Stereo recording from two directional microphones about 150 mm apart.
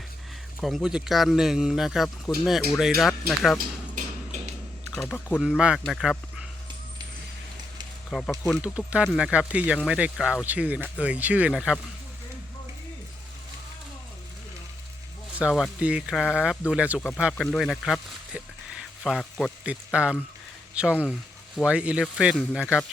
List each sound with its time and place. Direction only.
0.6 s speech: centre (ahead or behind)
3.6 s a sound: 55° right (ahead or behind)
4.9 s speech: 5° left (ahead or behind)
5.4 s speech: 5° right (ahead or behind)
8.1 s speech: centre (ahead or behind)
15.4 s speech: centre (ahead or behind)